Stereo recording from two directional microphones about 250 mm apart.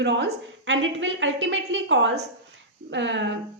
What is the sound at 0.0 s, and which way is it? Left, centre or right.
A woman's voice, right.